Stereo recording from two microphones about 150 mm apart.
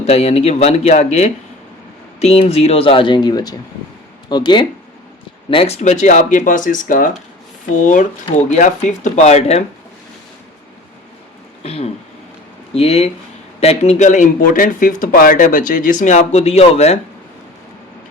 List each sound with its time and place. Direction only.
0.0 s speech: 45° left (ahead or behind); by 4.6 s 30° left (ahead or behind)
5.5 s speech: 40° left (ahead or behind); by 7.1 s 65° left (ahead or behind)
8.4 s speech: 50° left (ahead or behind)
11.6 s speech: 40° left (ahead or behind)